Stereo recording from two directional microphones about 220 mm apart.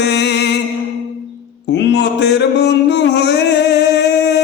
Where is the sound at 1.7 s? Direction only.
50° left (ahead or behind).